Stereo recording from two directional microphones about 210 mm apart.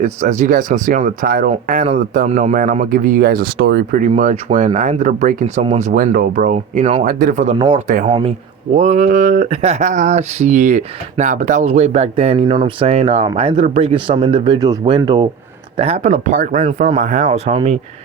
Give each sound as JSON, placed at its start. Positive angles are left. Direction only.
{"t": 0.0, "sound": "speech", "side_deg": -35}
{"t": 4.1, "sound": "speech", "side_deg": -35}
{"t": 5.9, "sound": "speech", "side_deg": -40}
{"t": 7.1, "sound": "speech", "side_deg": -45}
{"t": 9.5, "sound": "speech", "side_deg": -30}
{"t": 15.8, "sound": "speech", "side_deg": -30}